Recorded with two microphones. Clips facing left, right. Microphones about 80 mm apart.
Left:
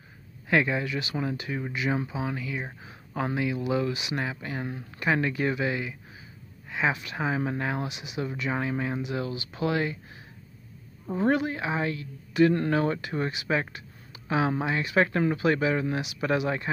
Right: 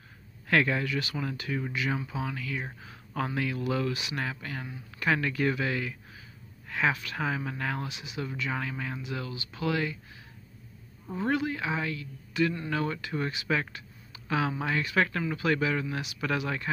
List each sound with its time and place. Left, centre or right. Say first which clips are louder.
0.5 s speech: left 1 dB; centre
11.1 s a woman's voice: left 4 dB; left